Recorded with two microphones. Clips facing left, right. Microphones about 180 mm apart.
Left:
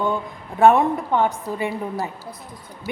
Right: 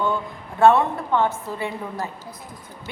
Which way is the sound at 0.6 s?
15° left (ahead or behind).